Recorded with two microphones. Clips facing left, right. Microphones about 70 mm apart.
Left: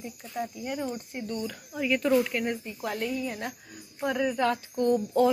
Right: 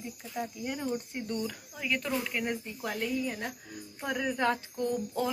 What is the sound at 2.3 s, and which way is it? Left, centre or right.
Speech, centre.